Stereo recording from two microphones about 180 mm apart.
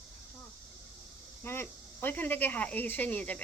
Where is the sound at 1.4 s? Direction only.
10° left (ahead or behind).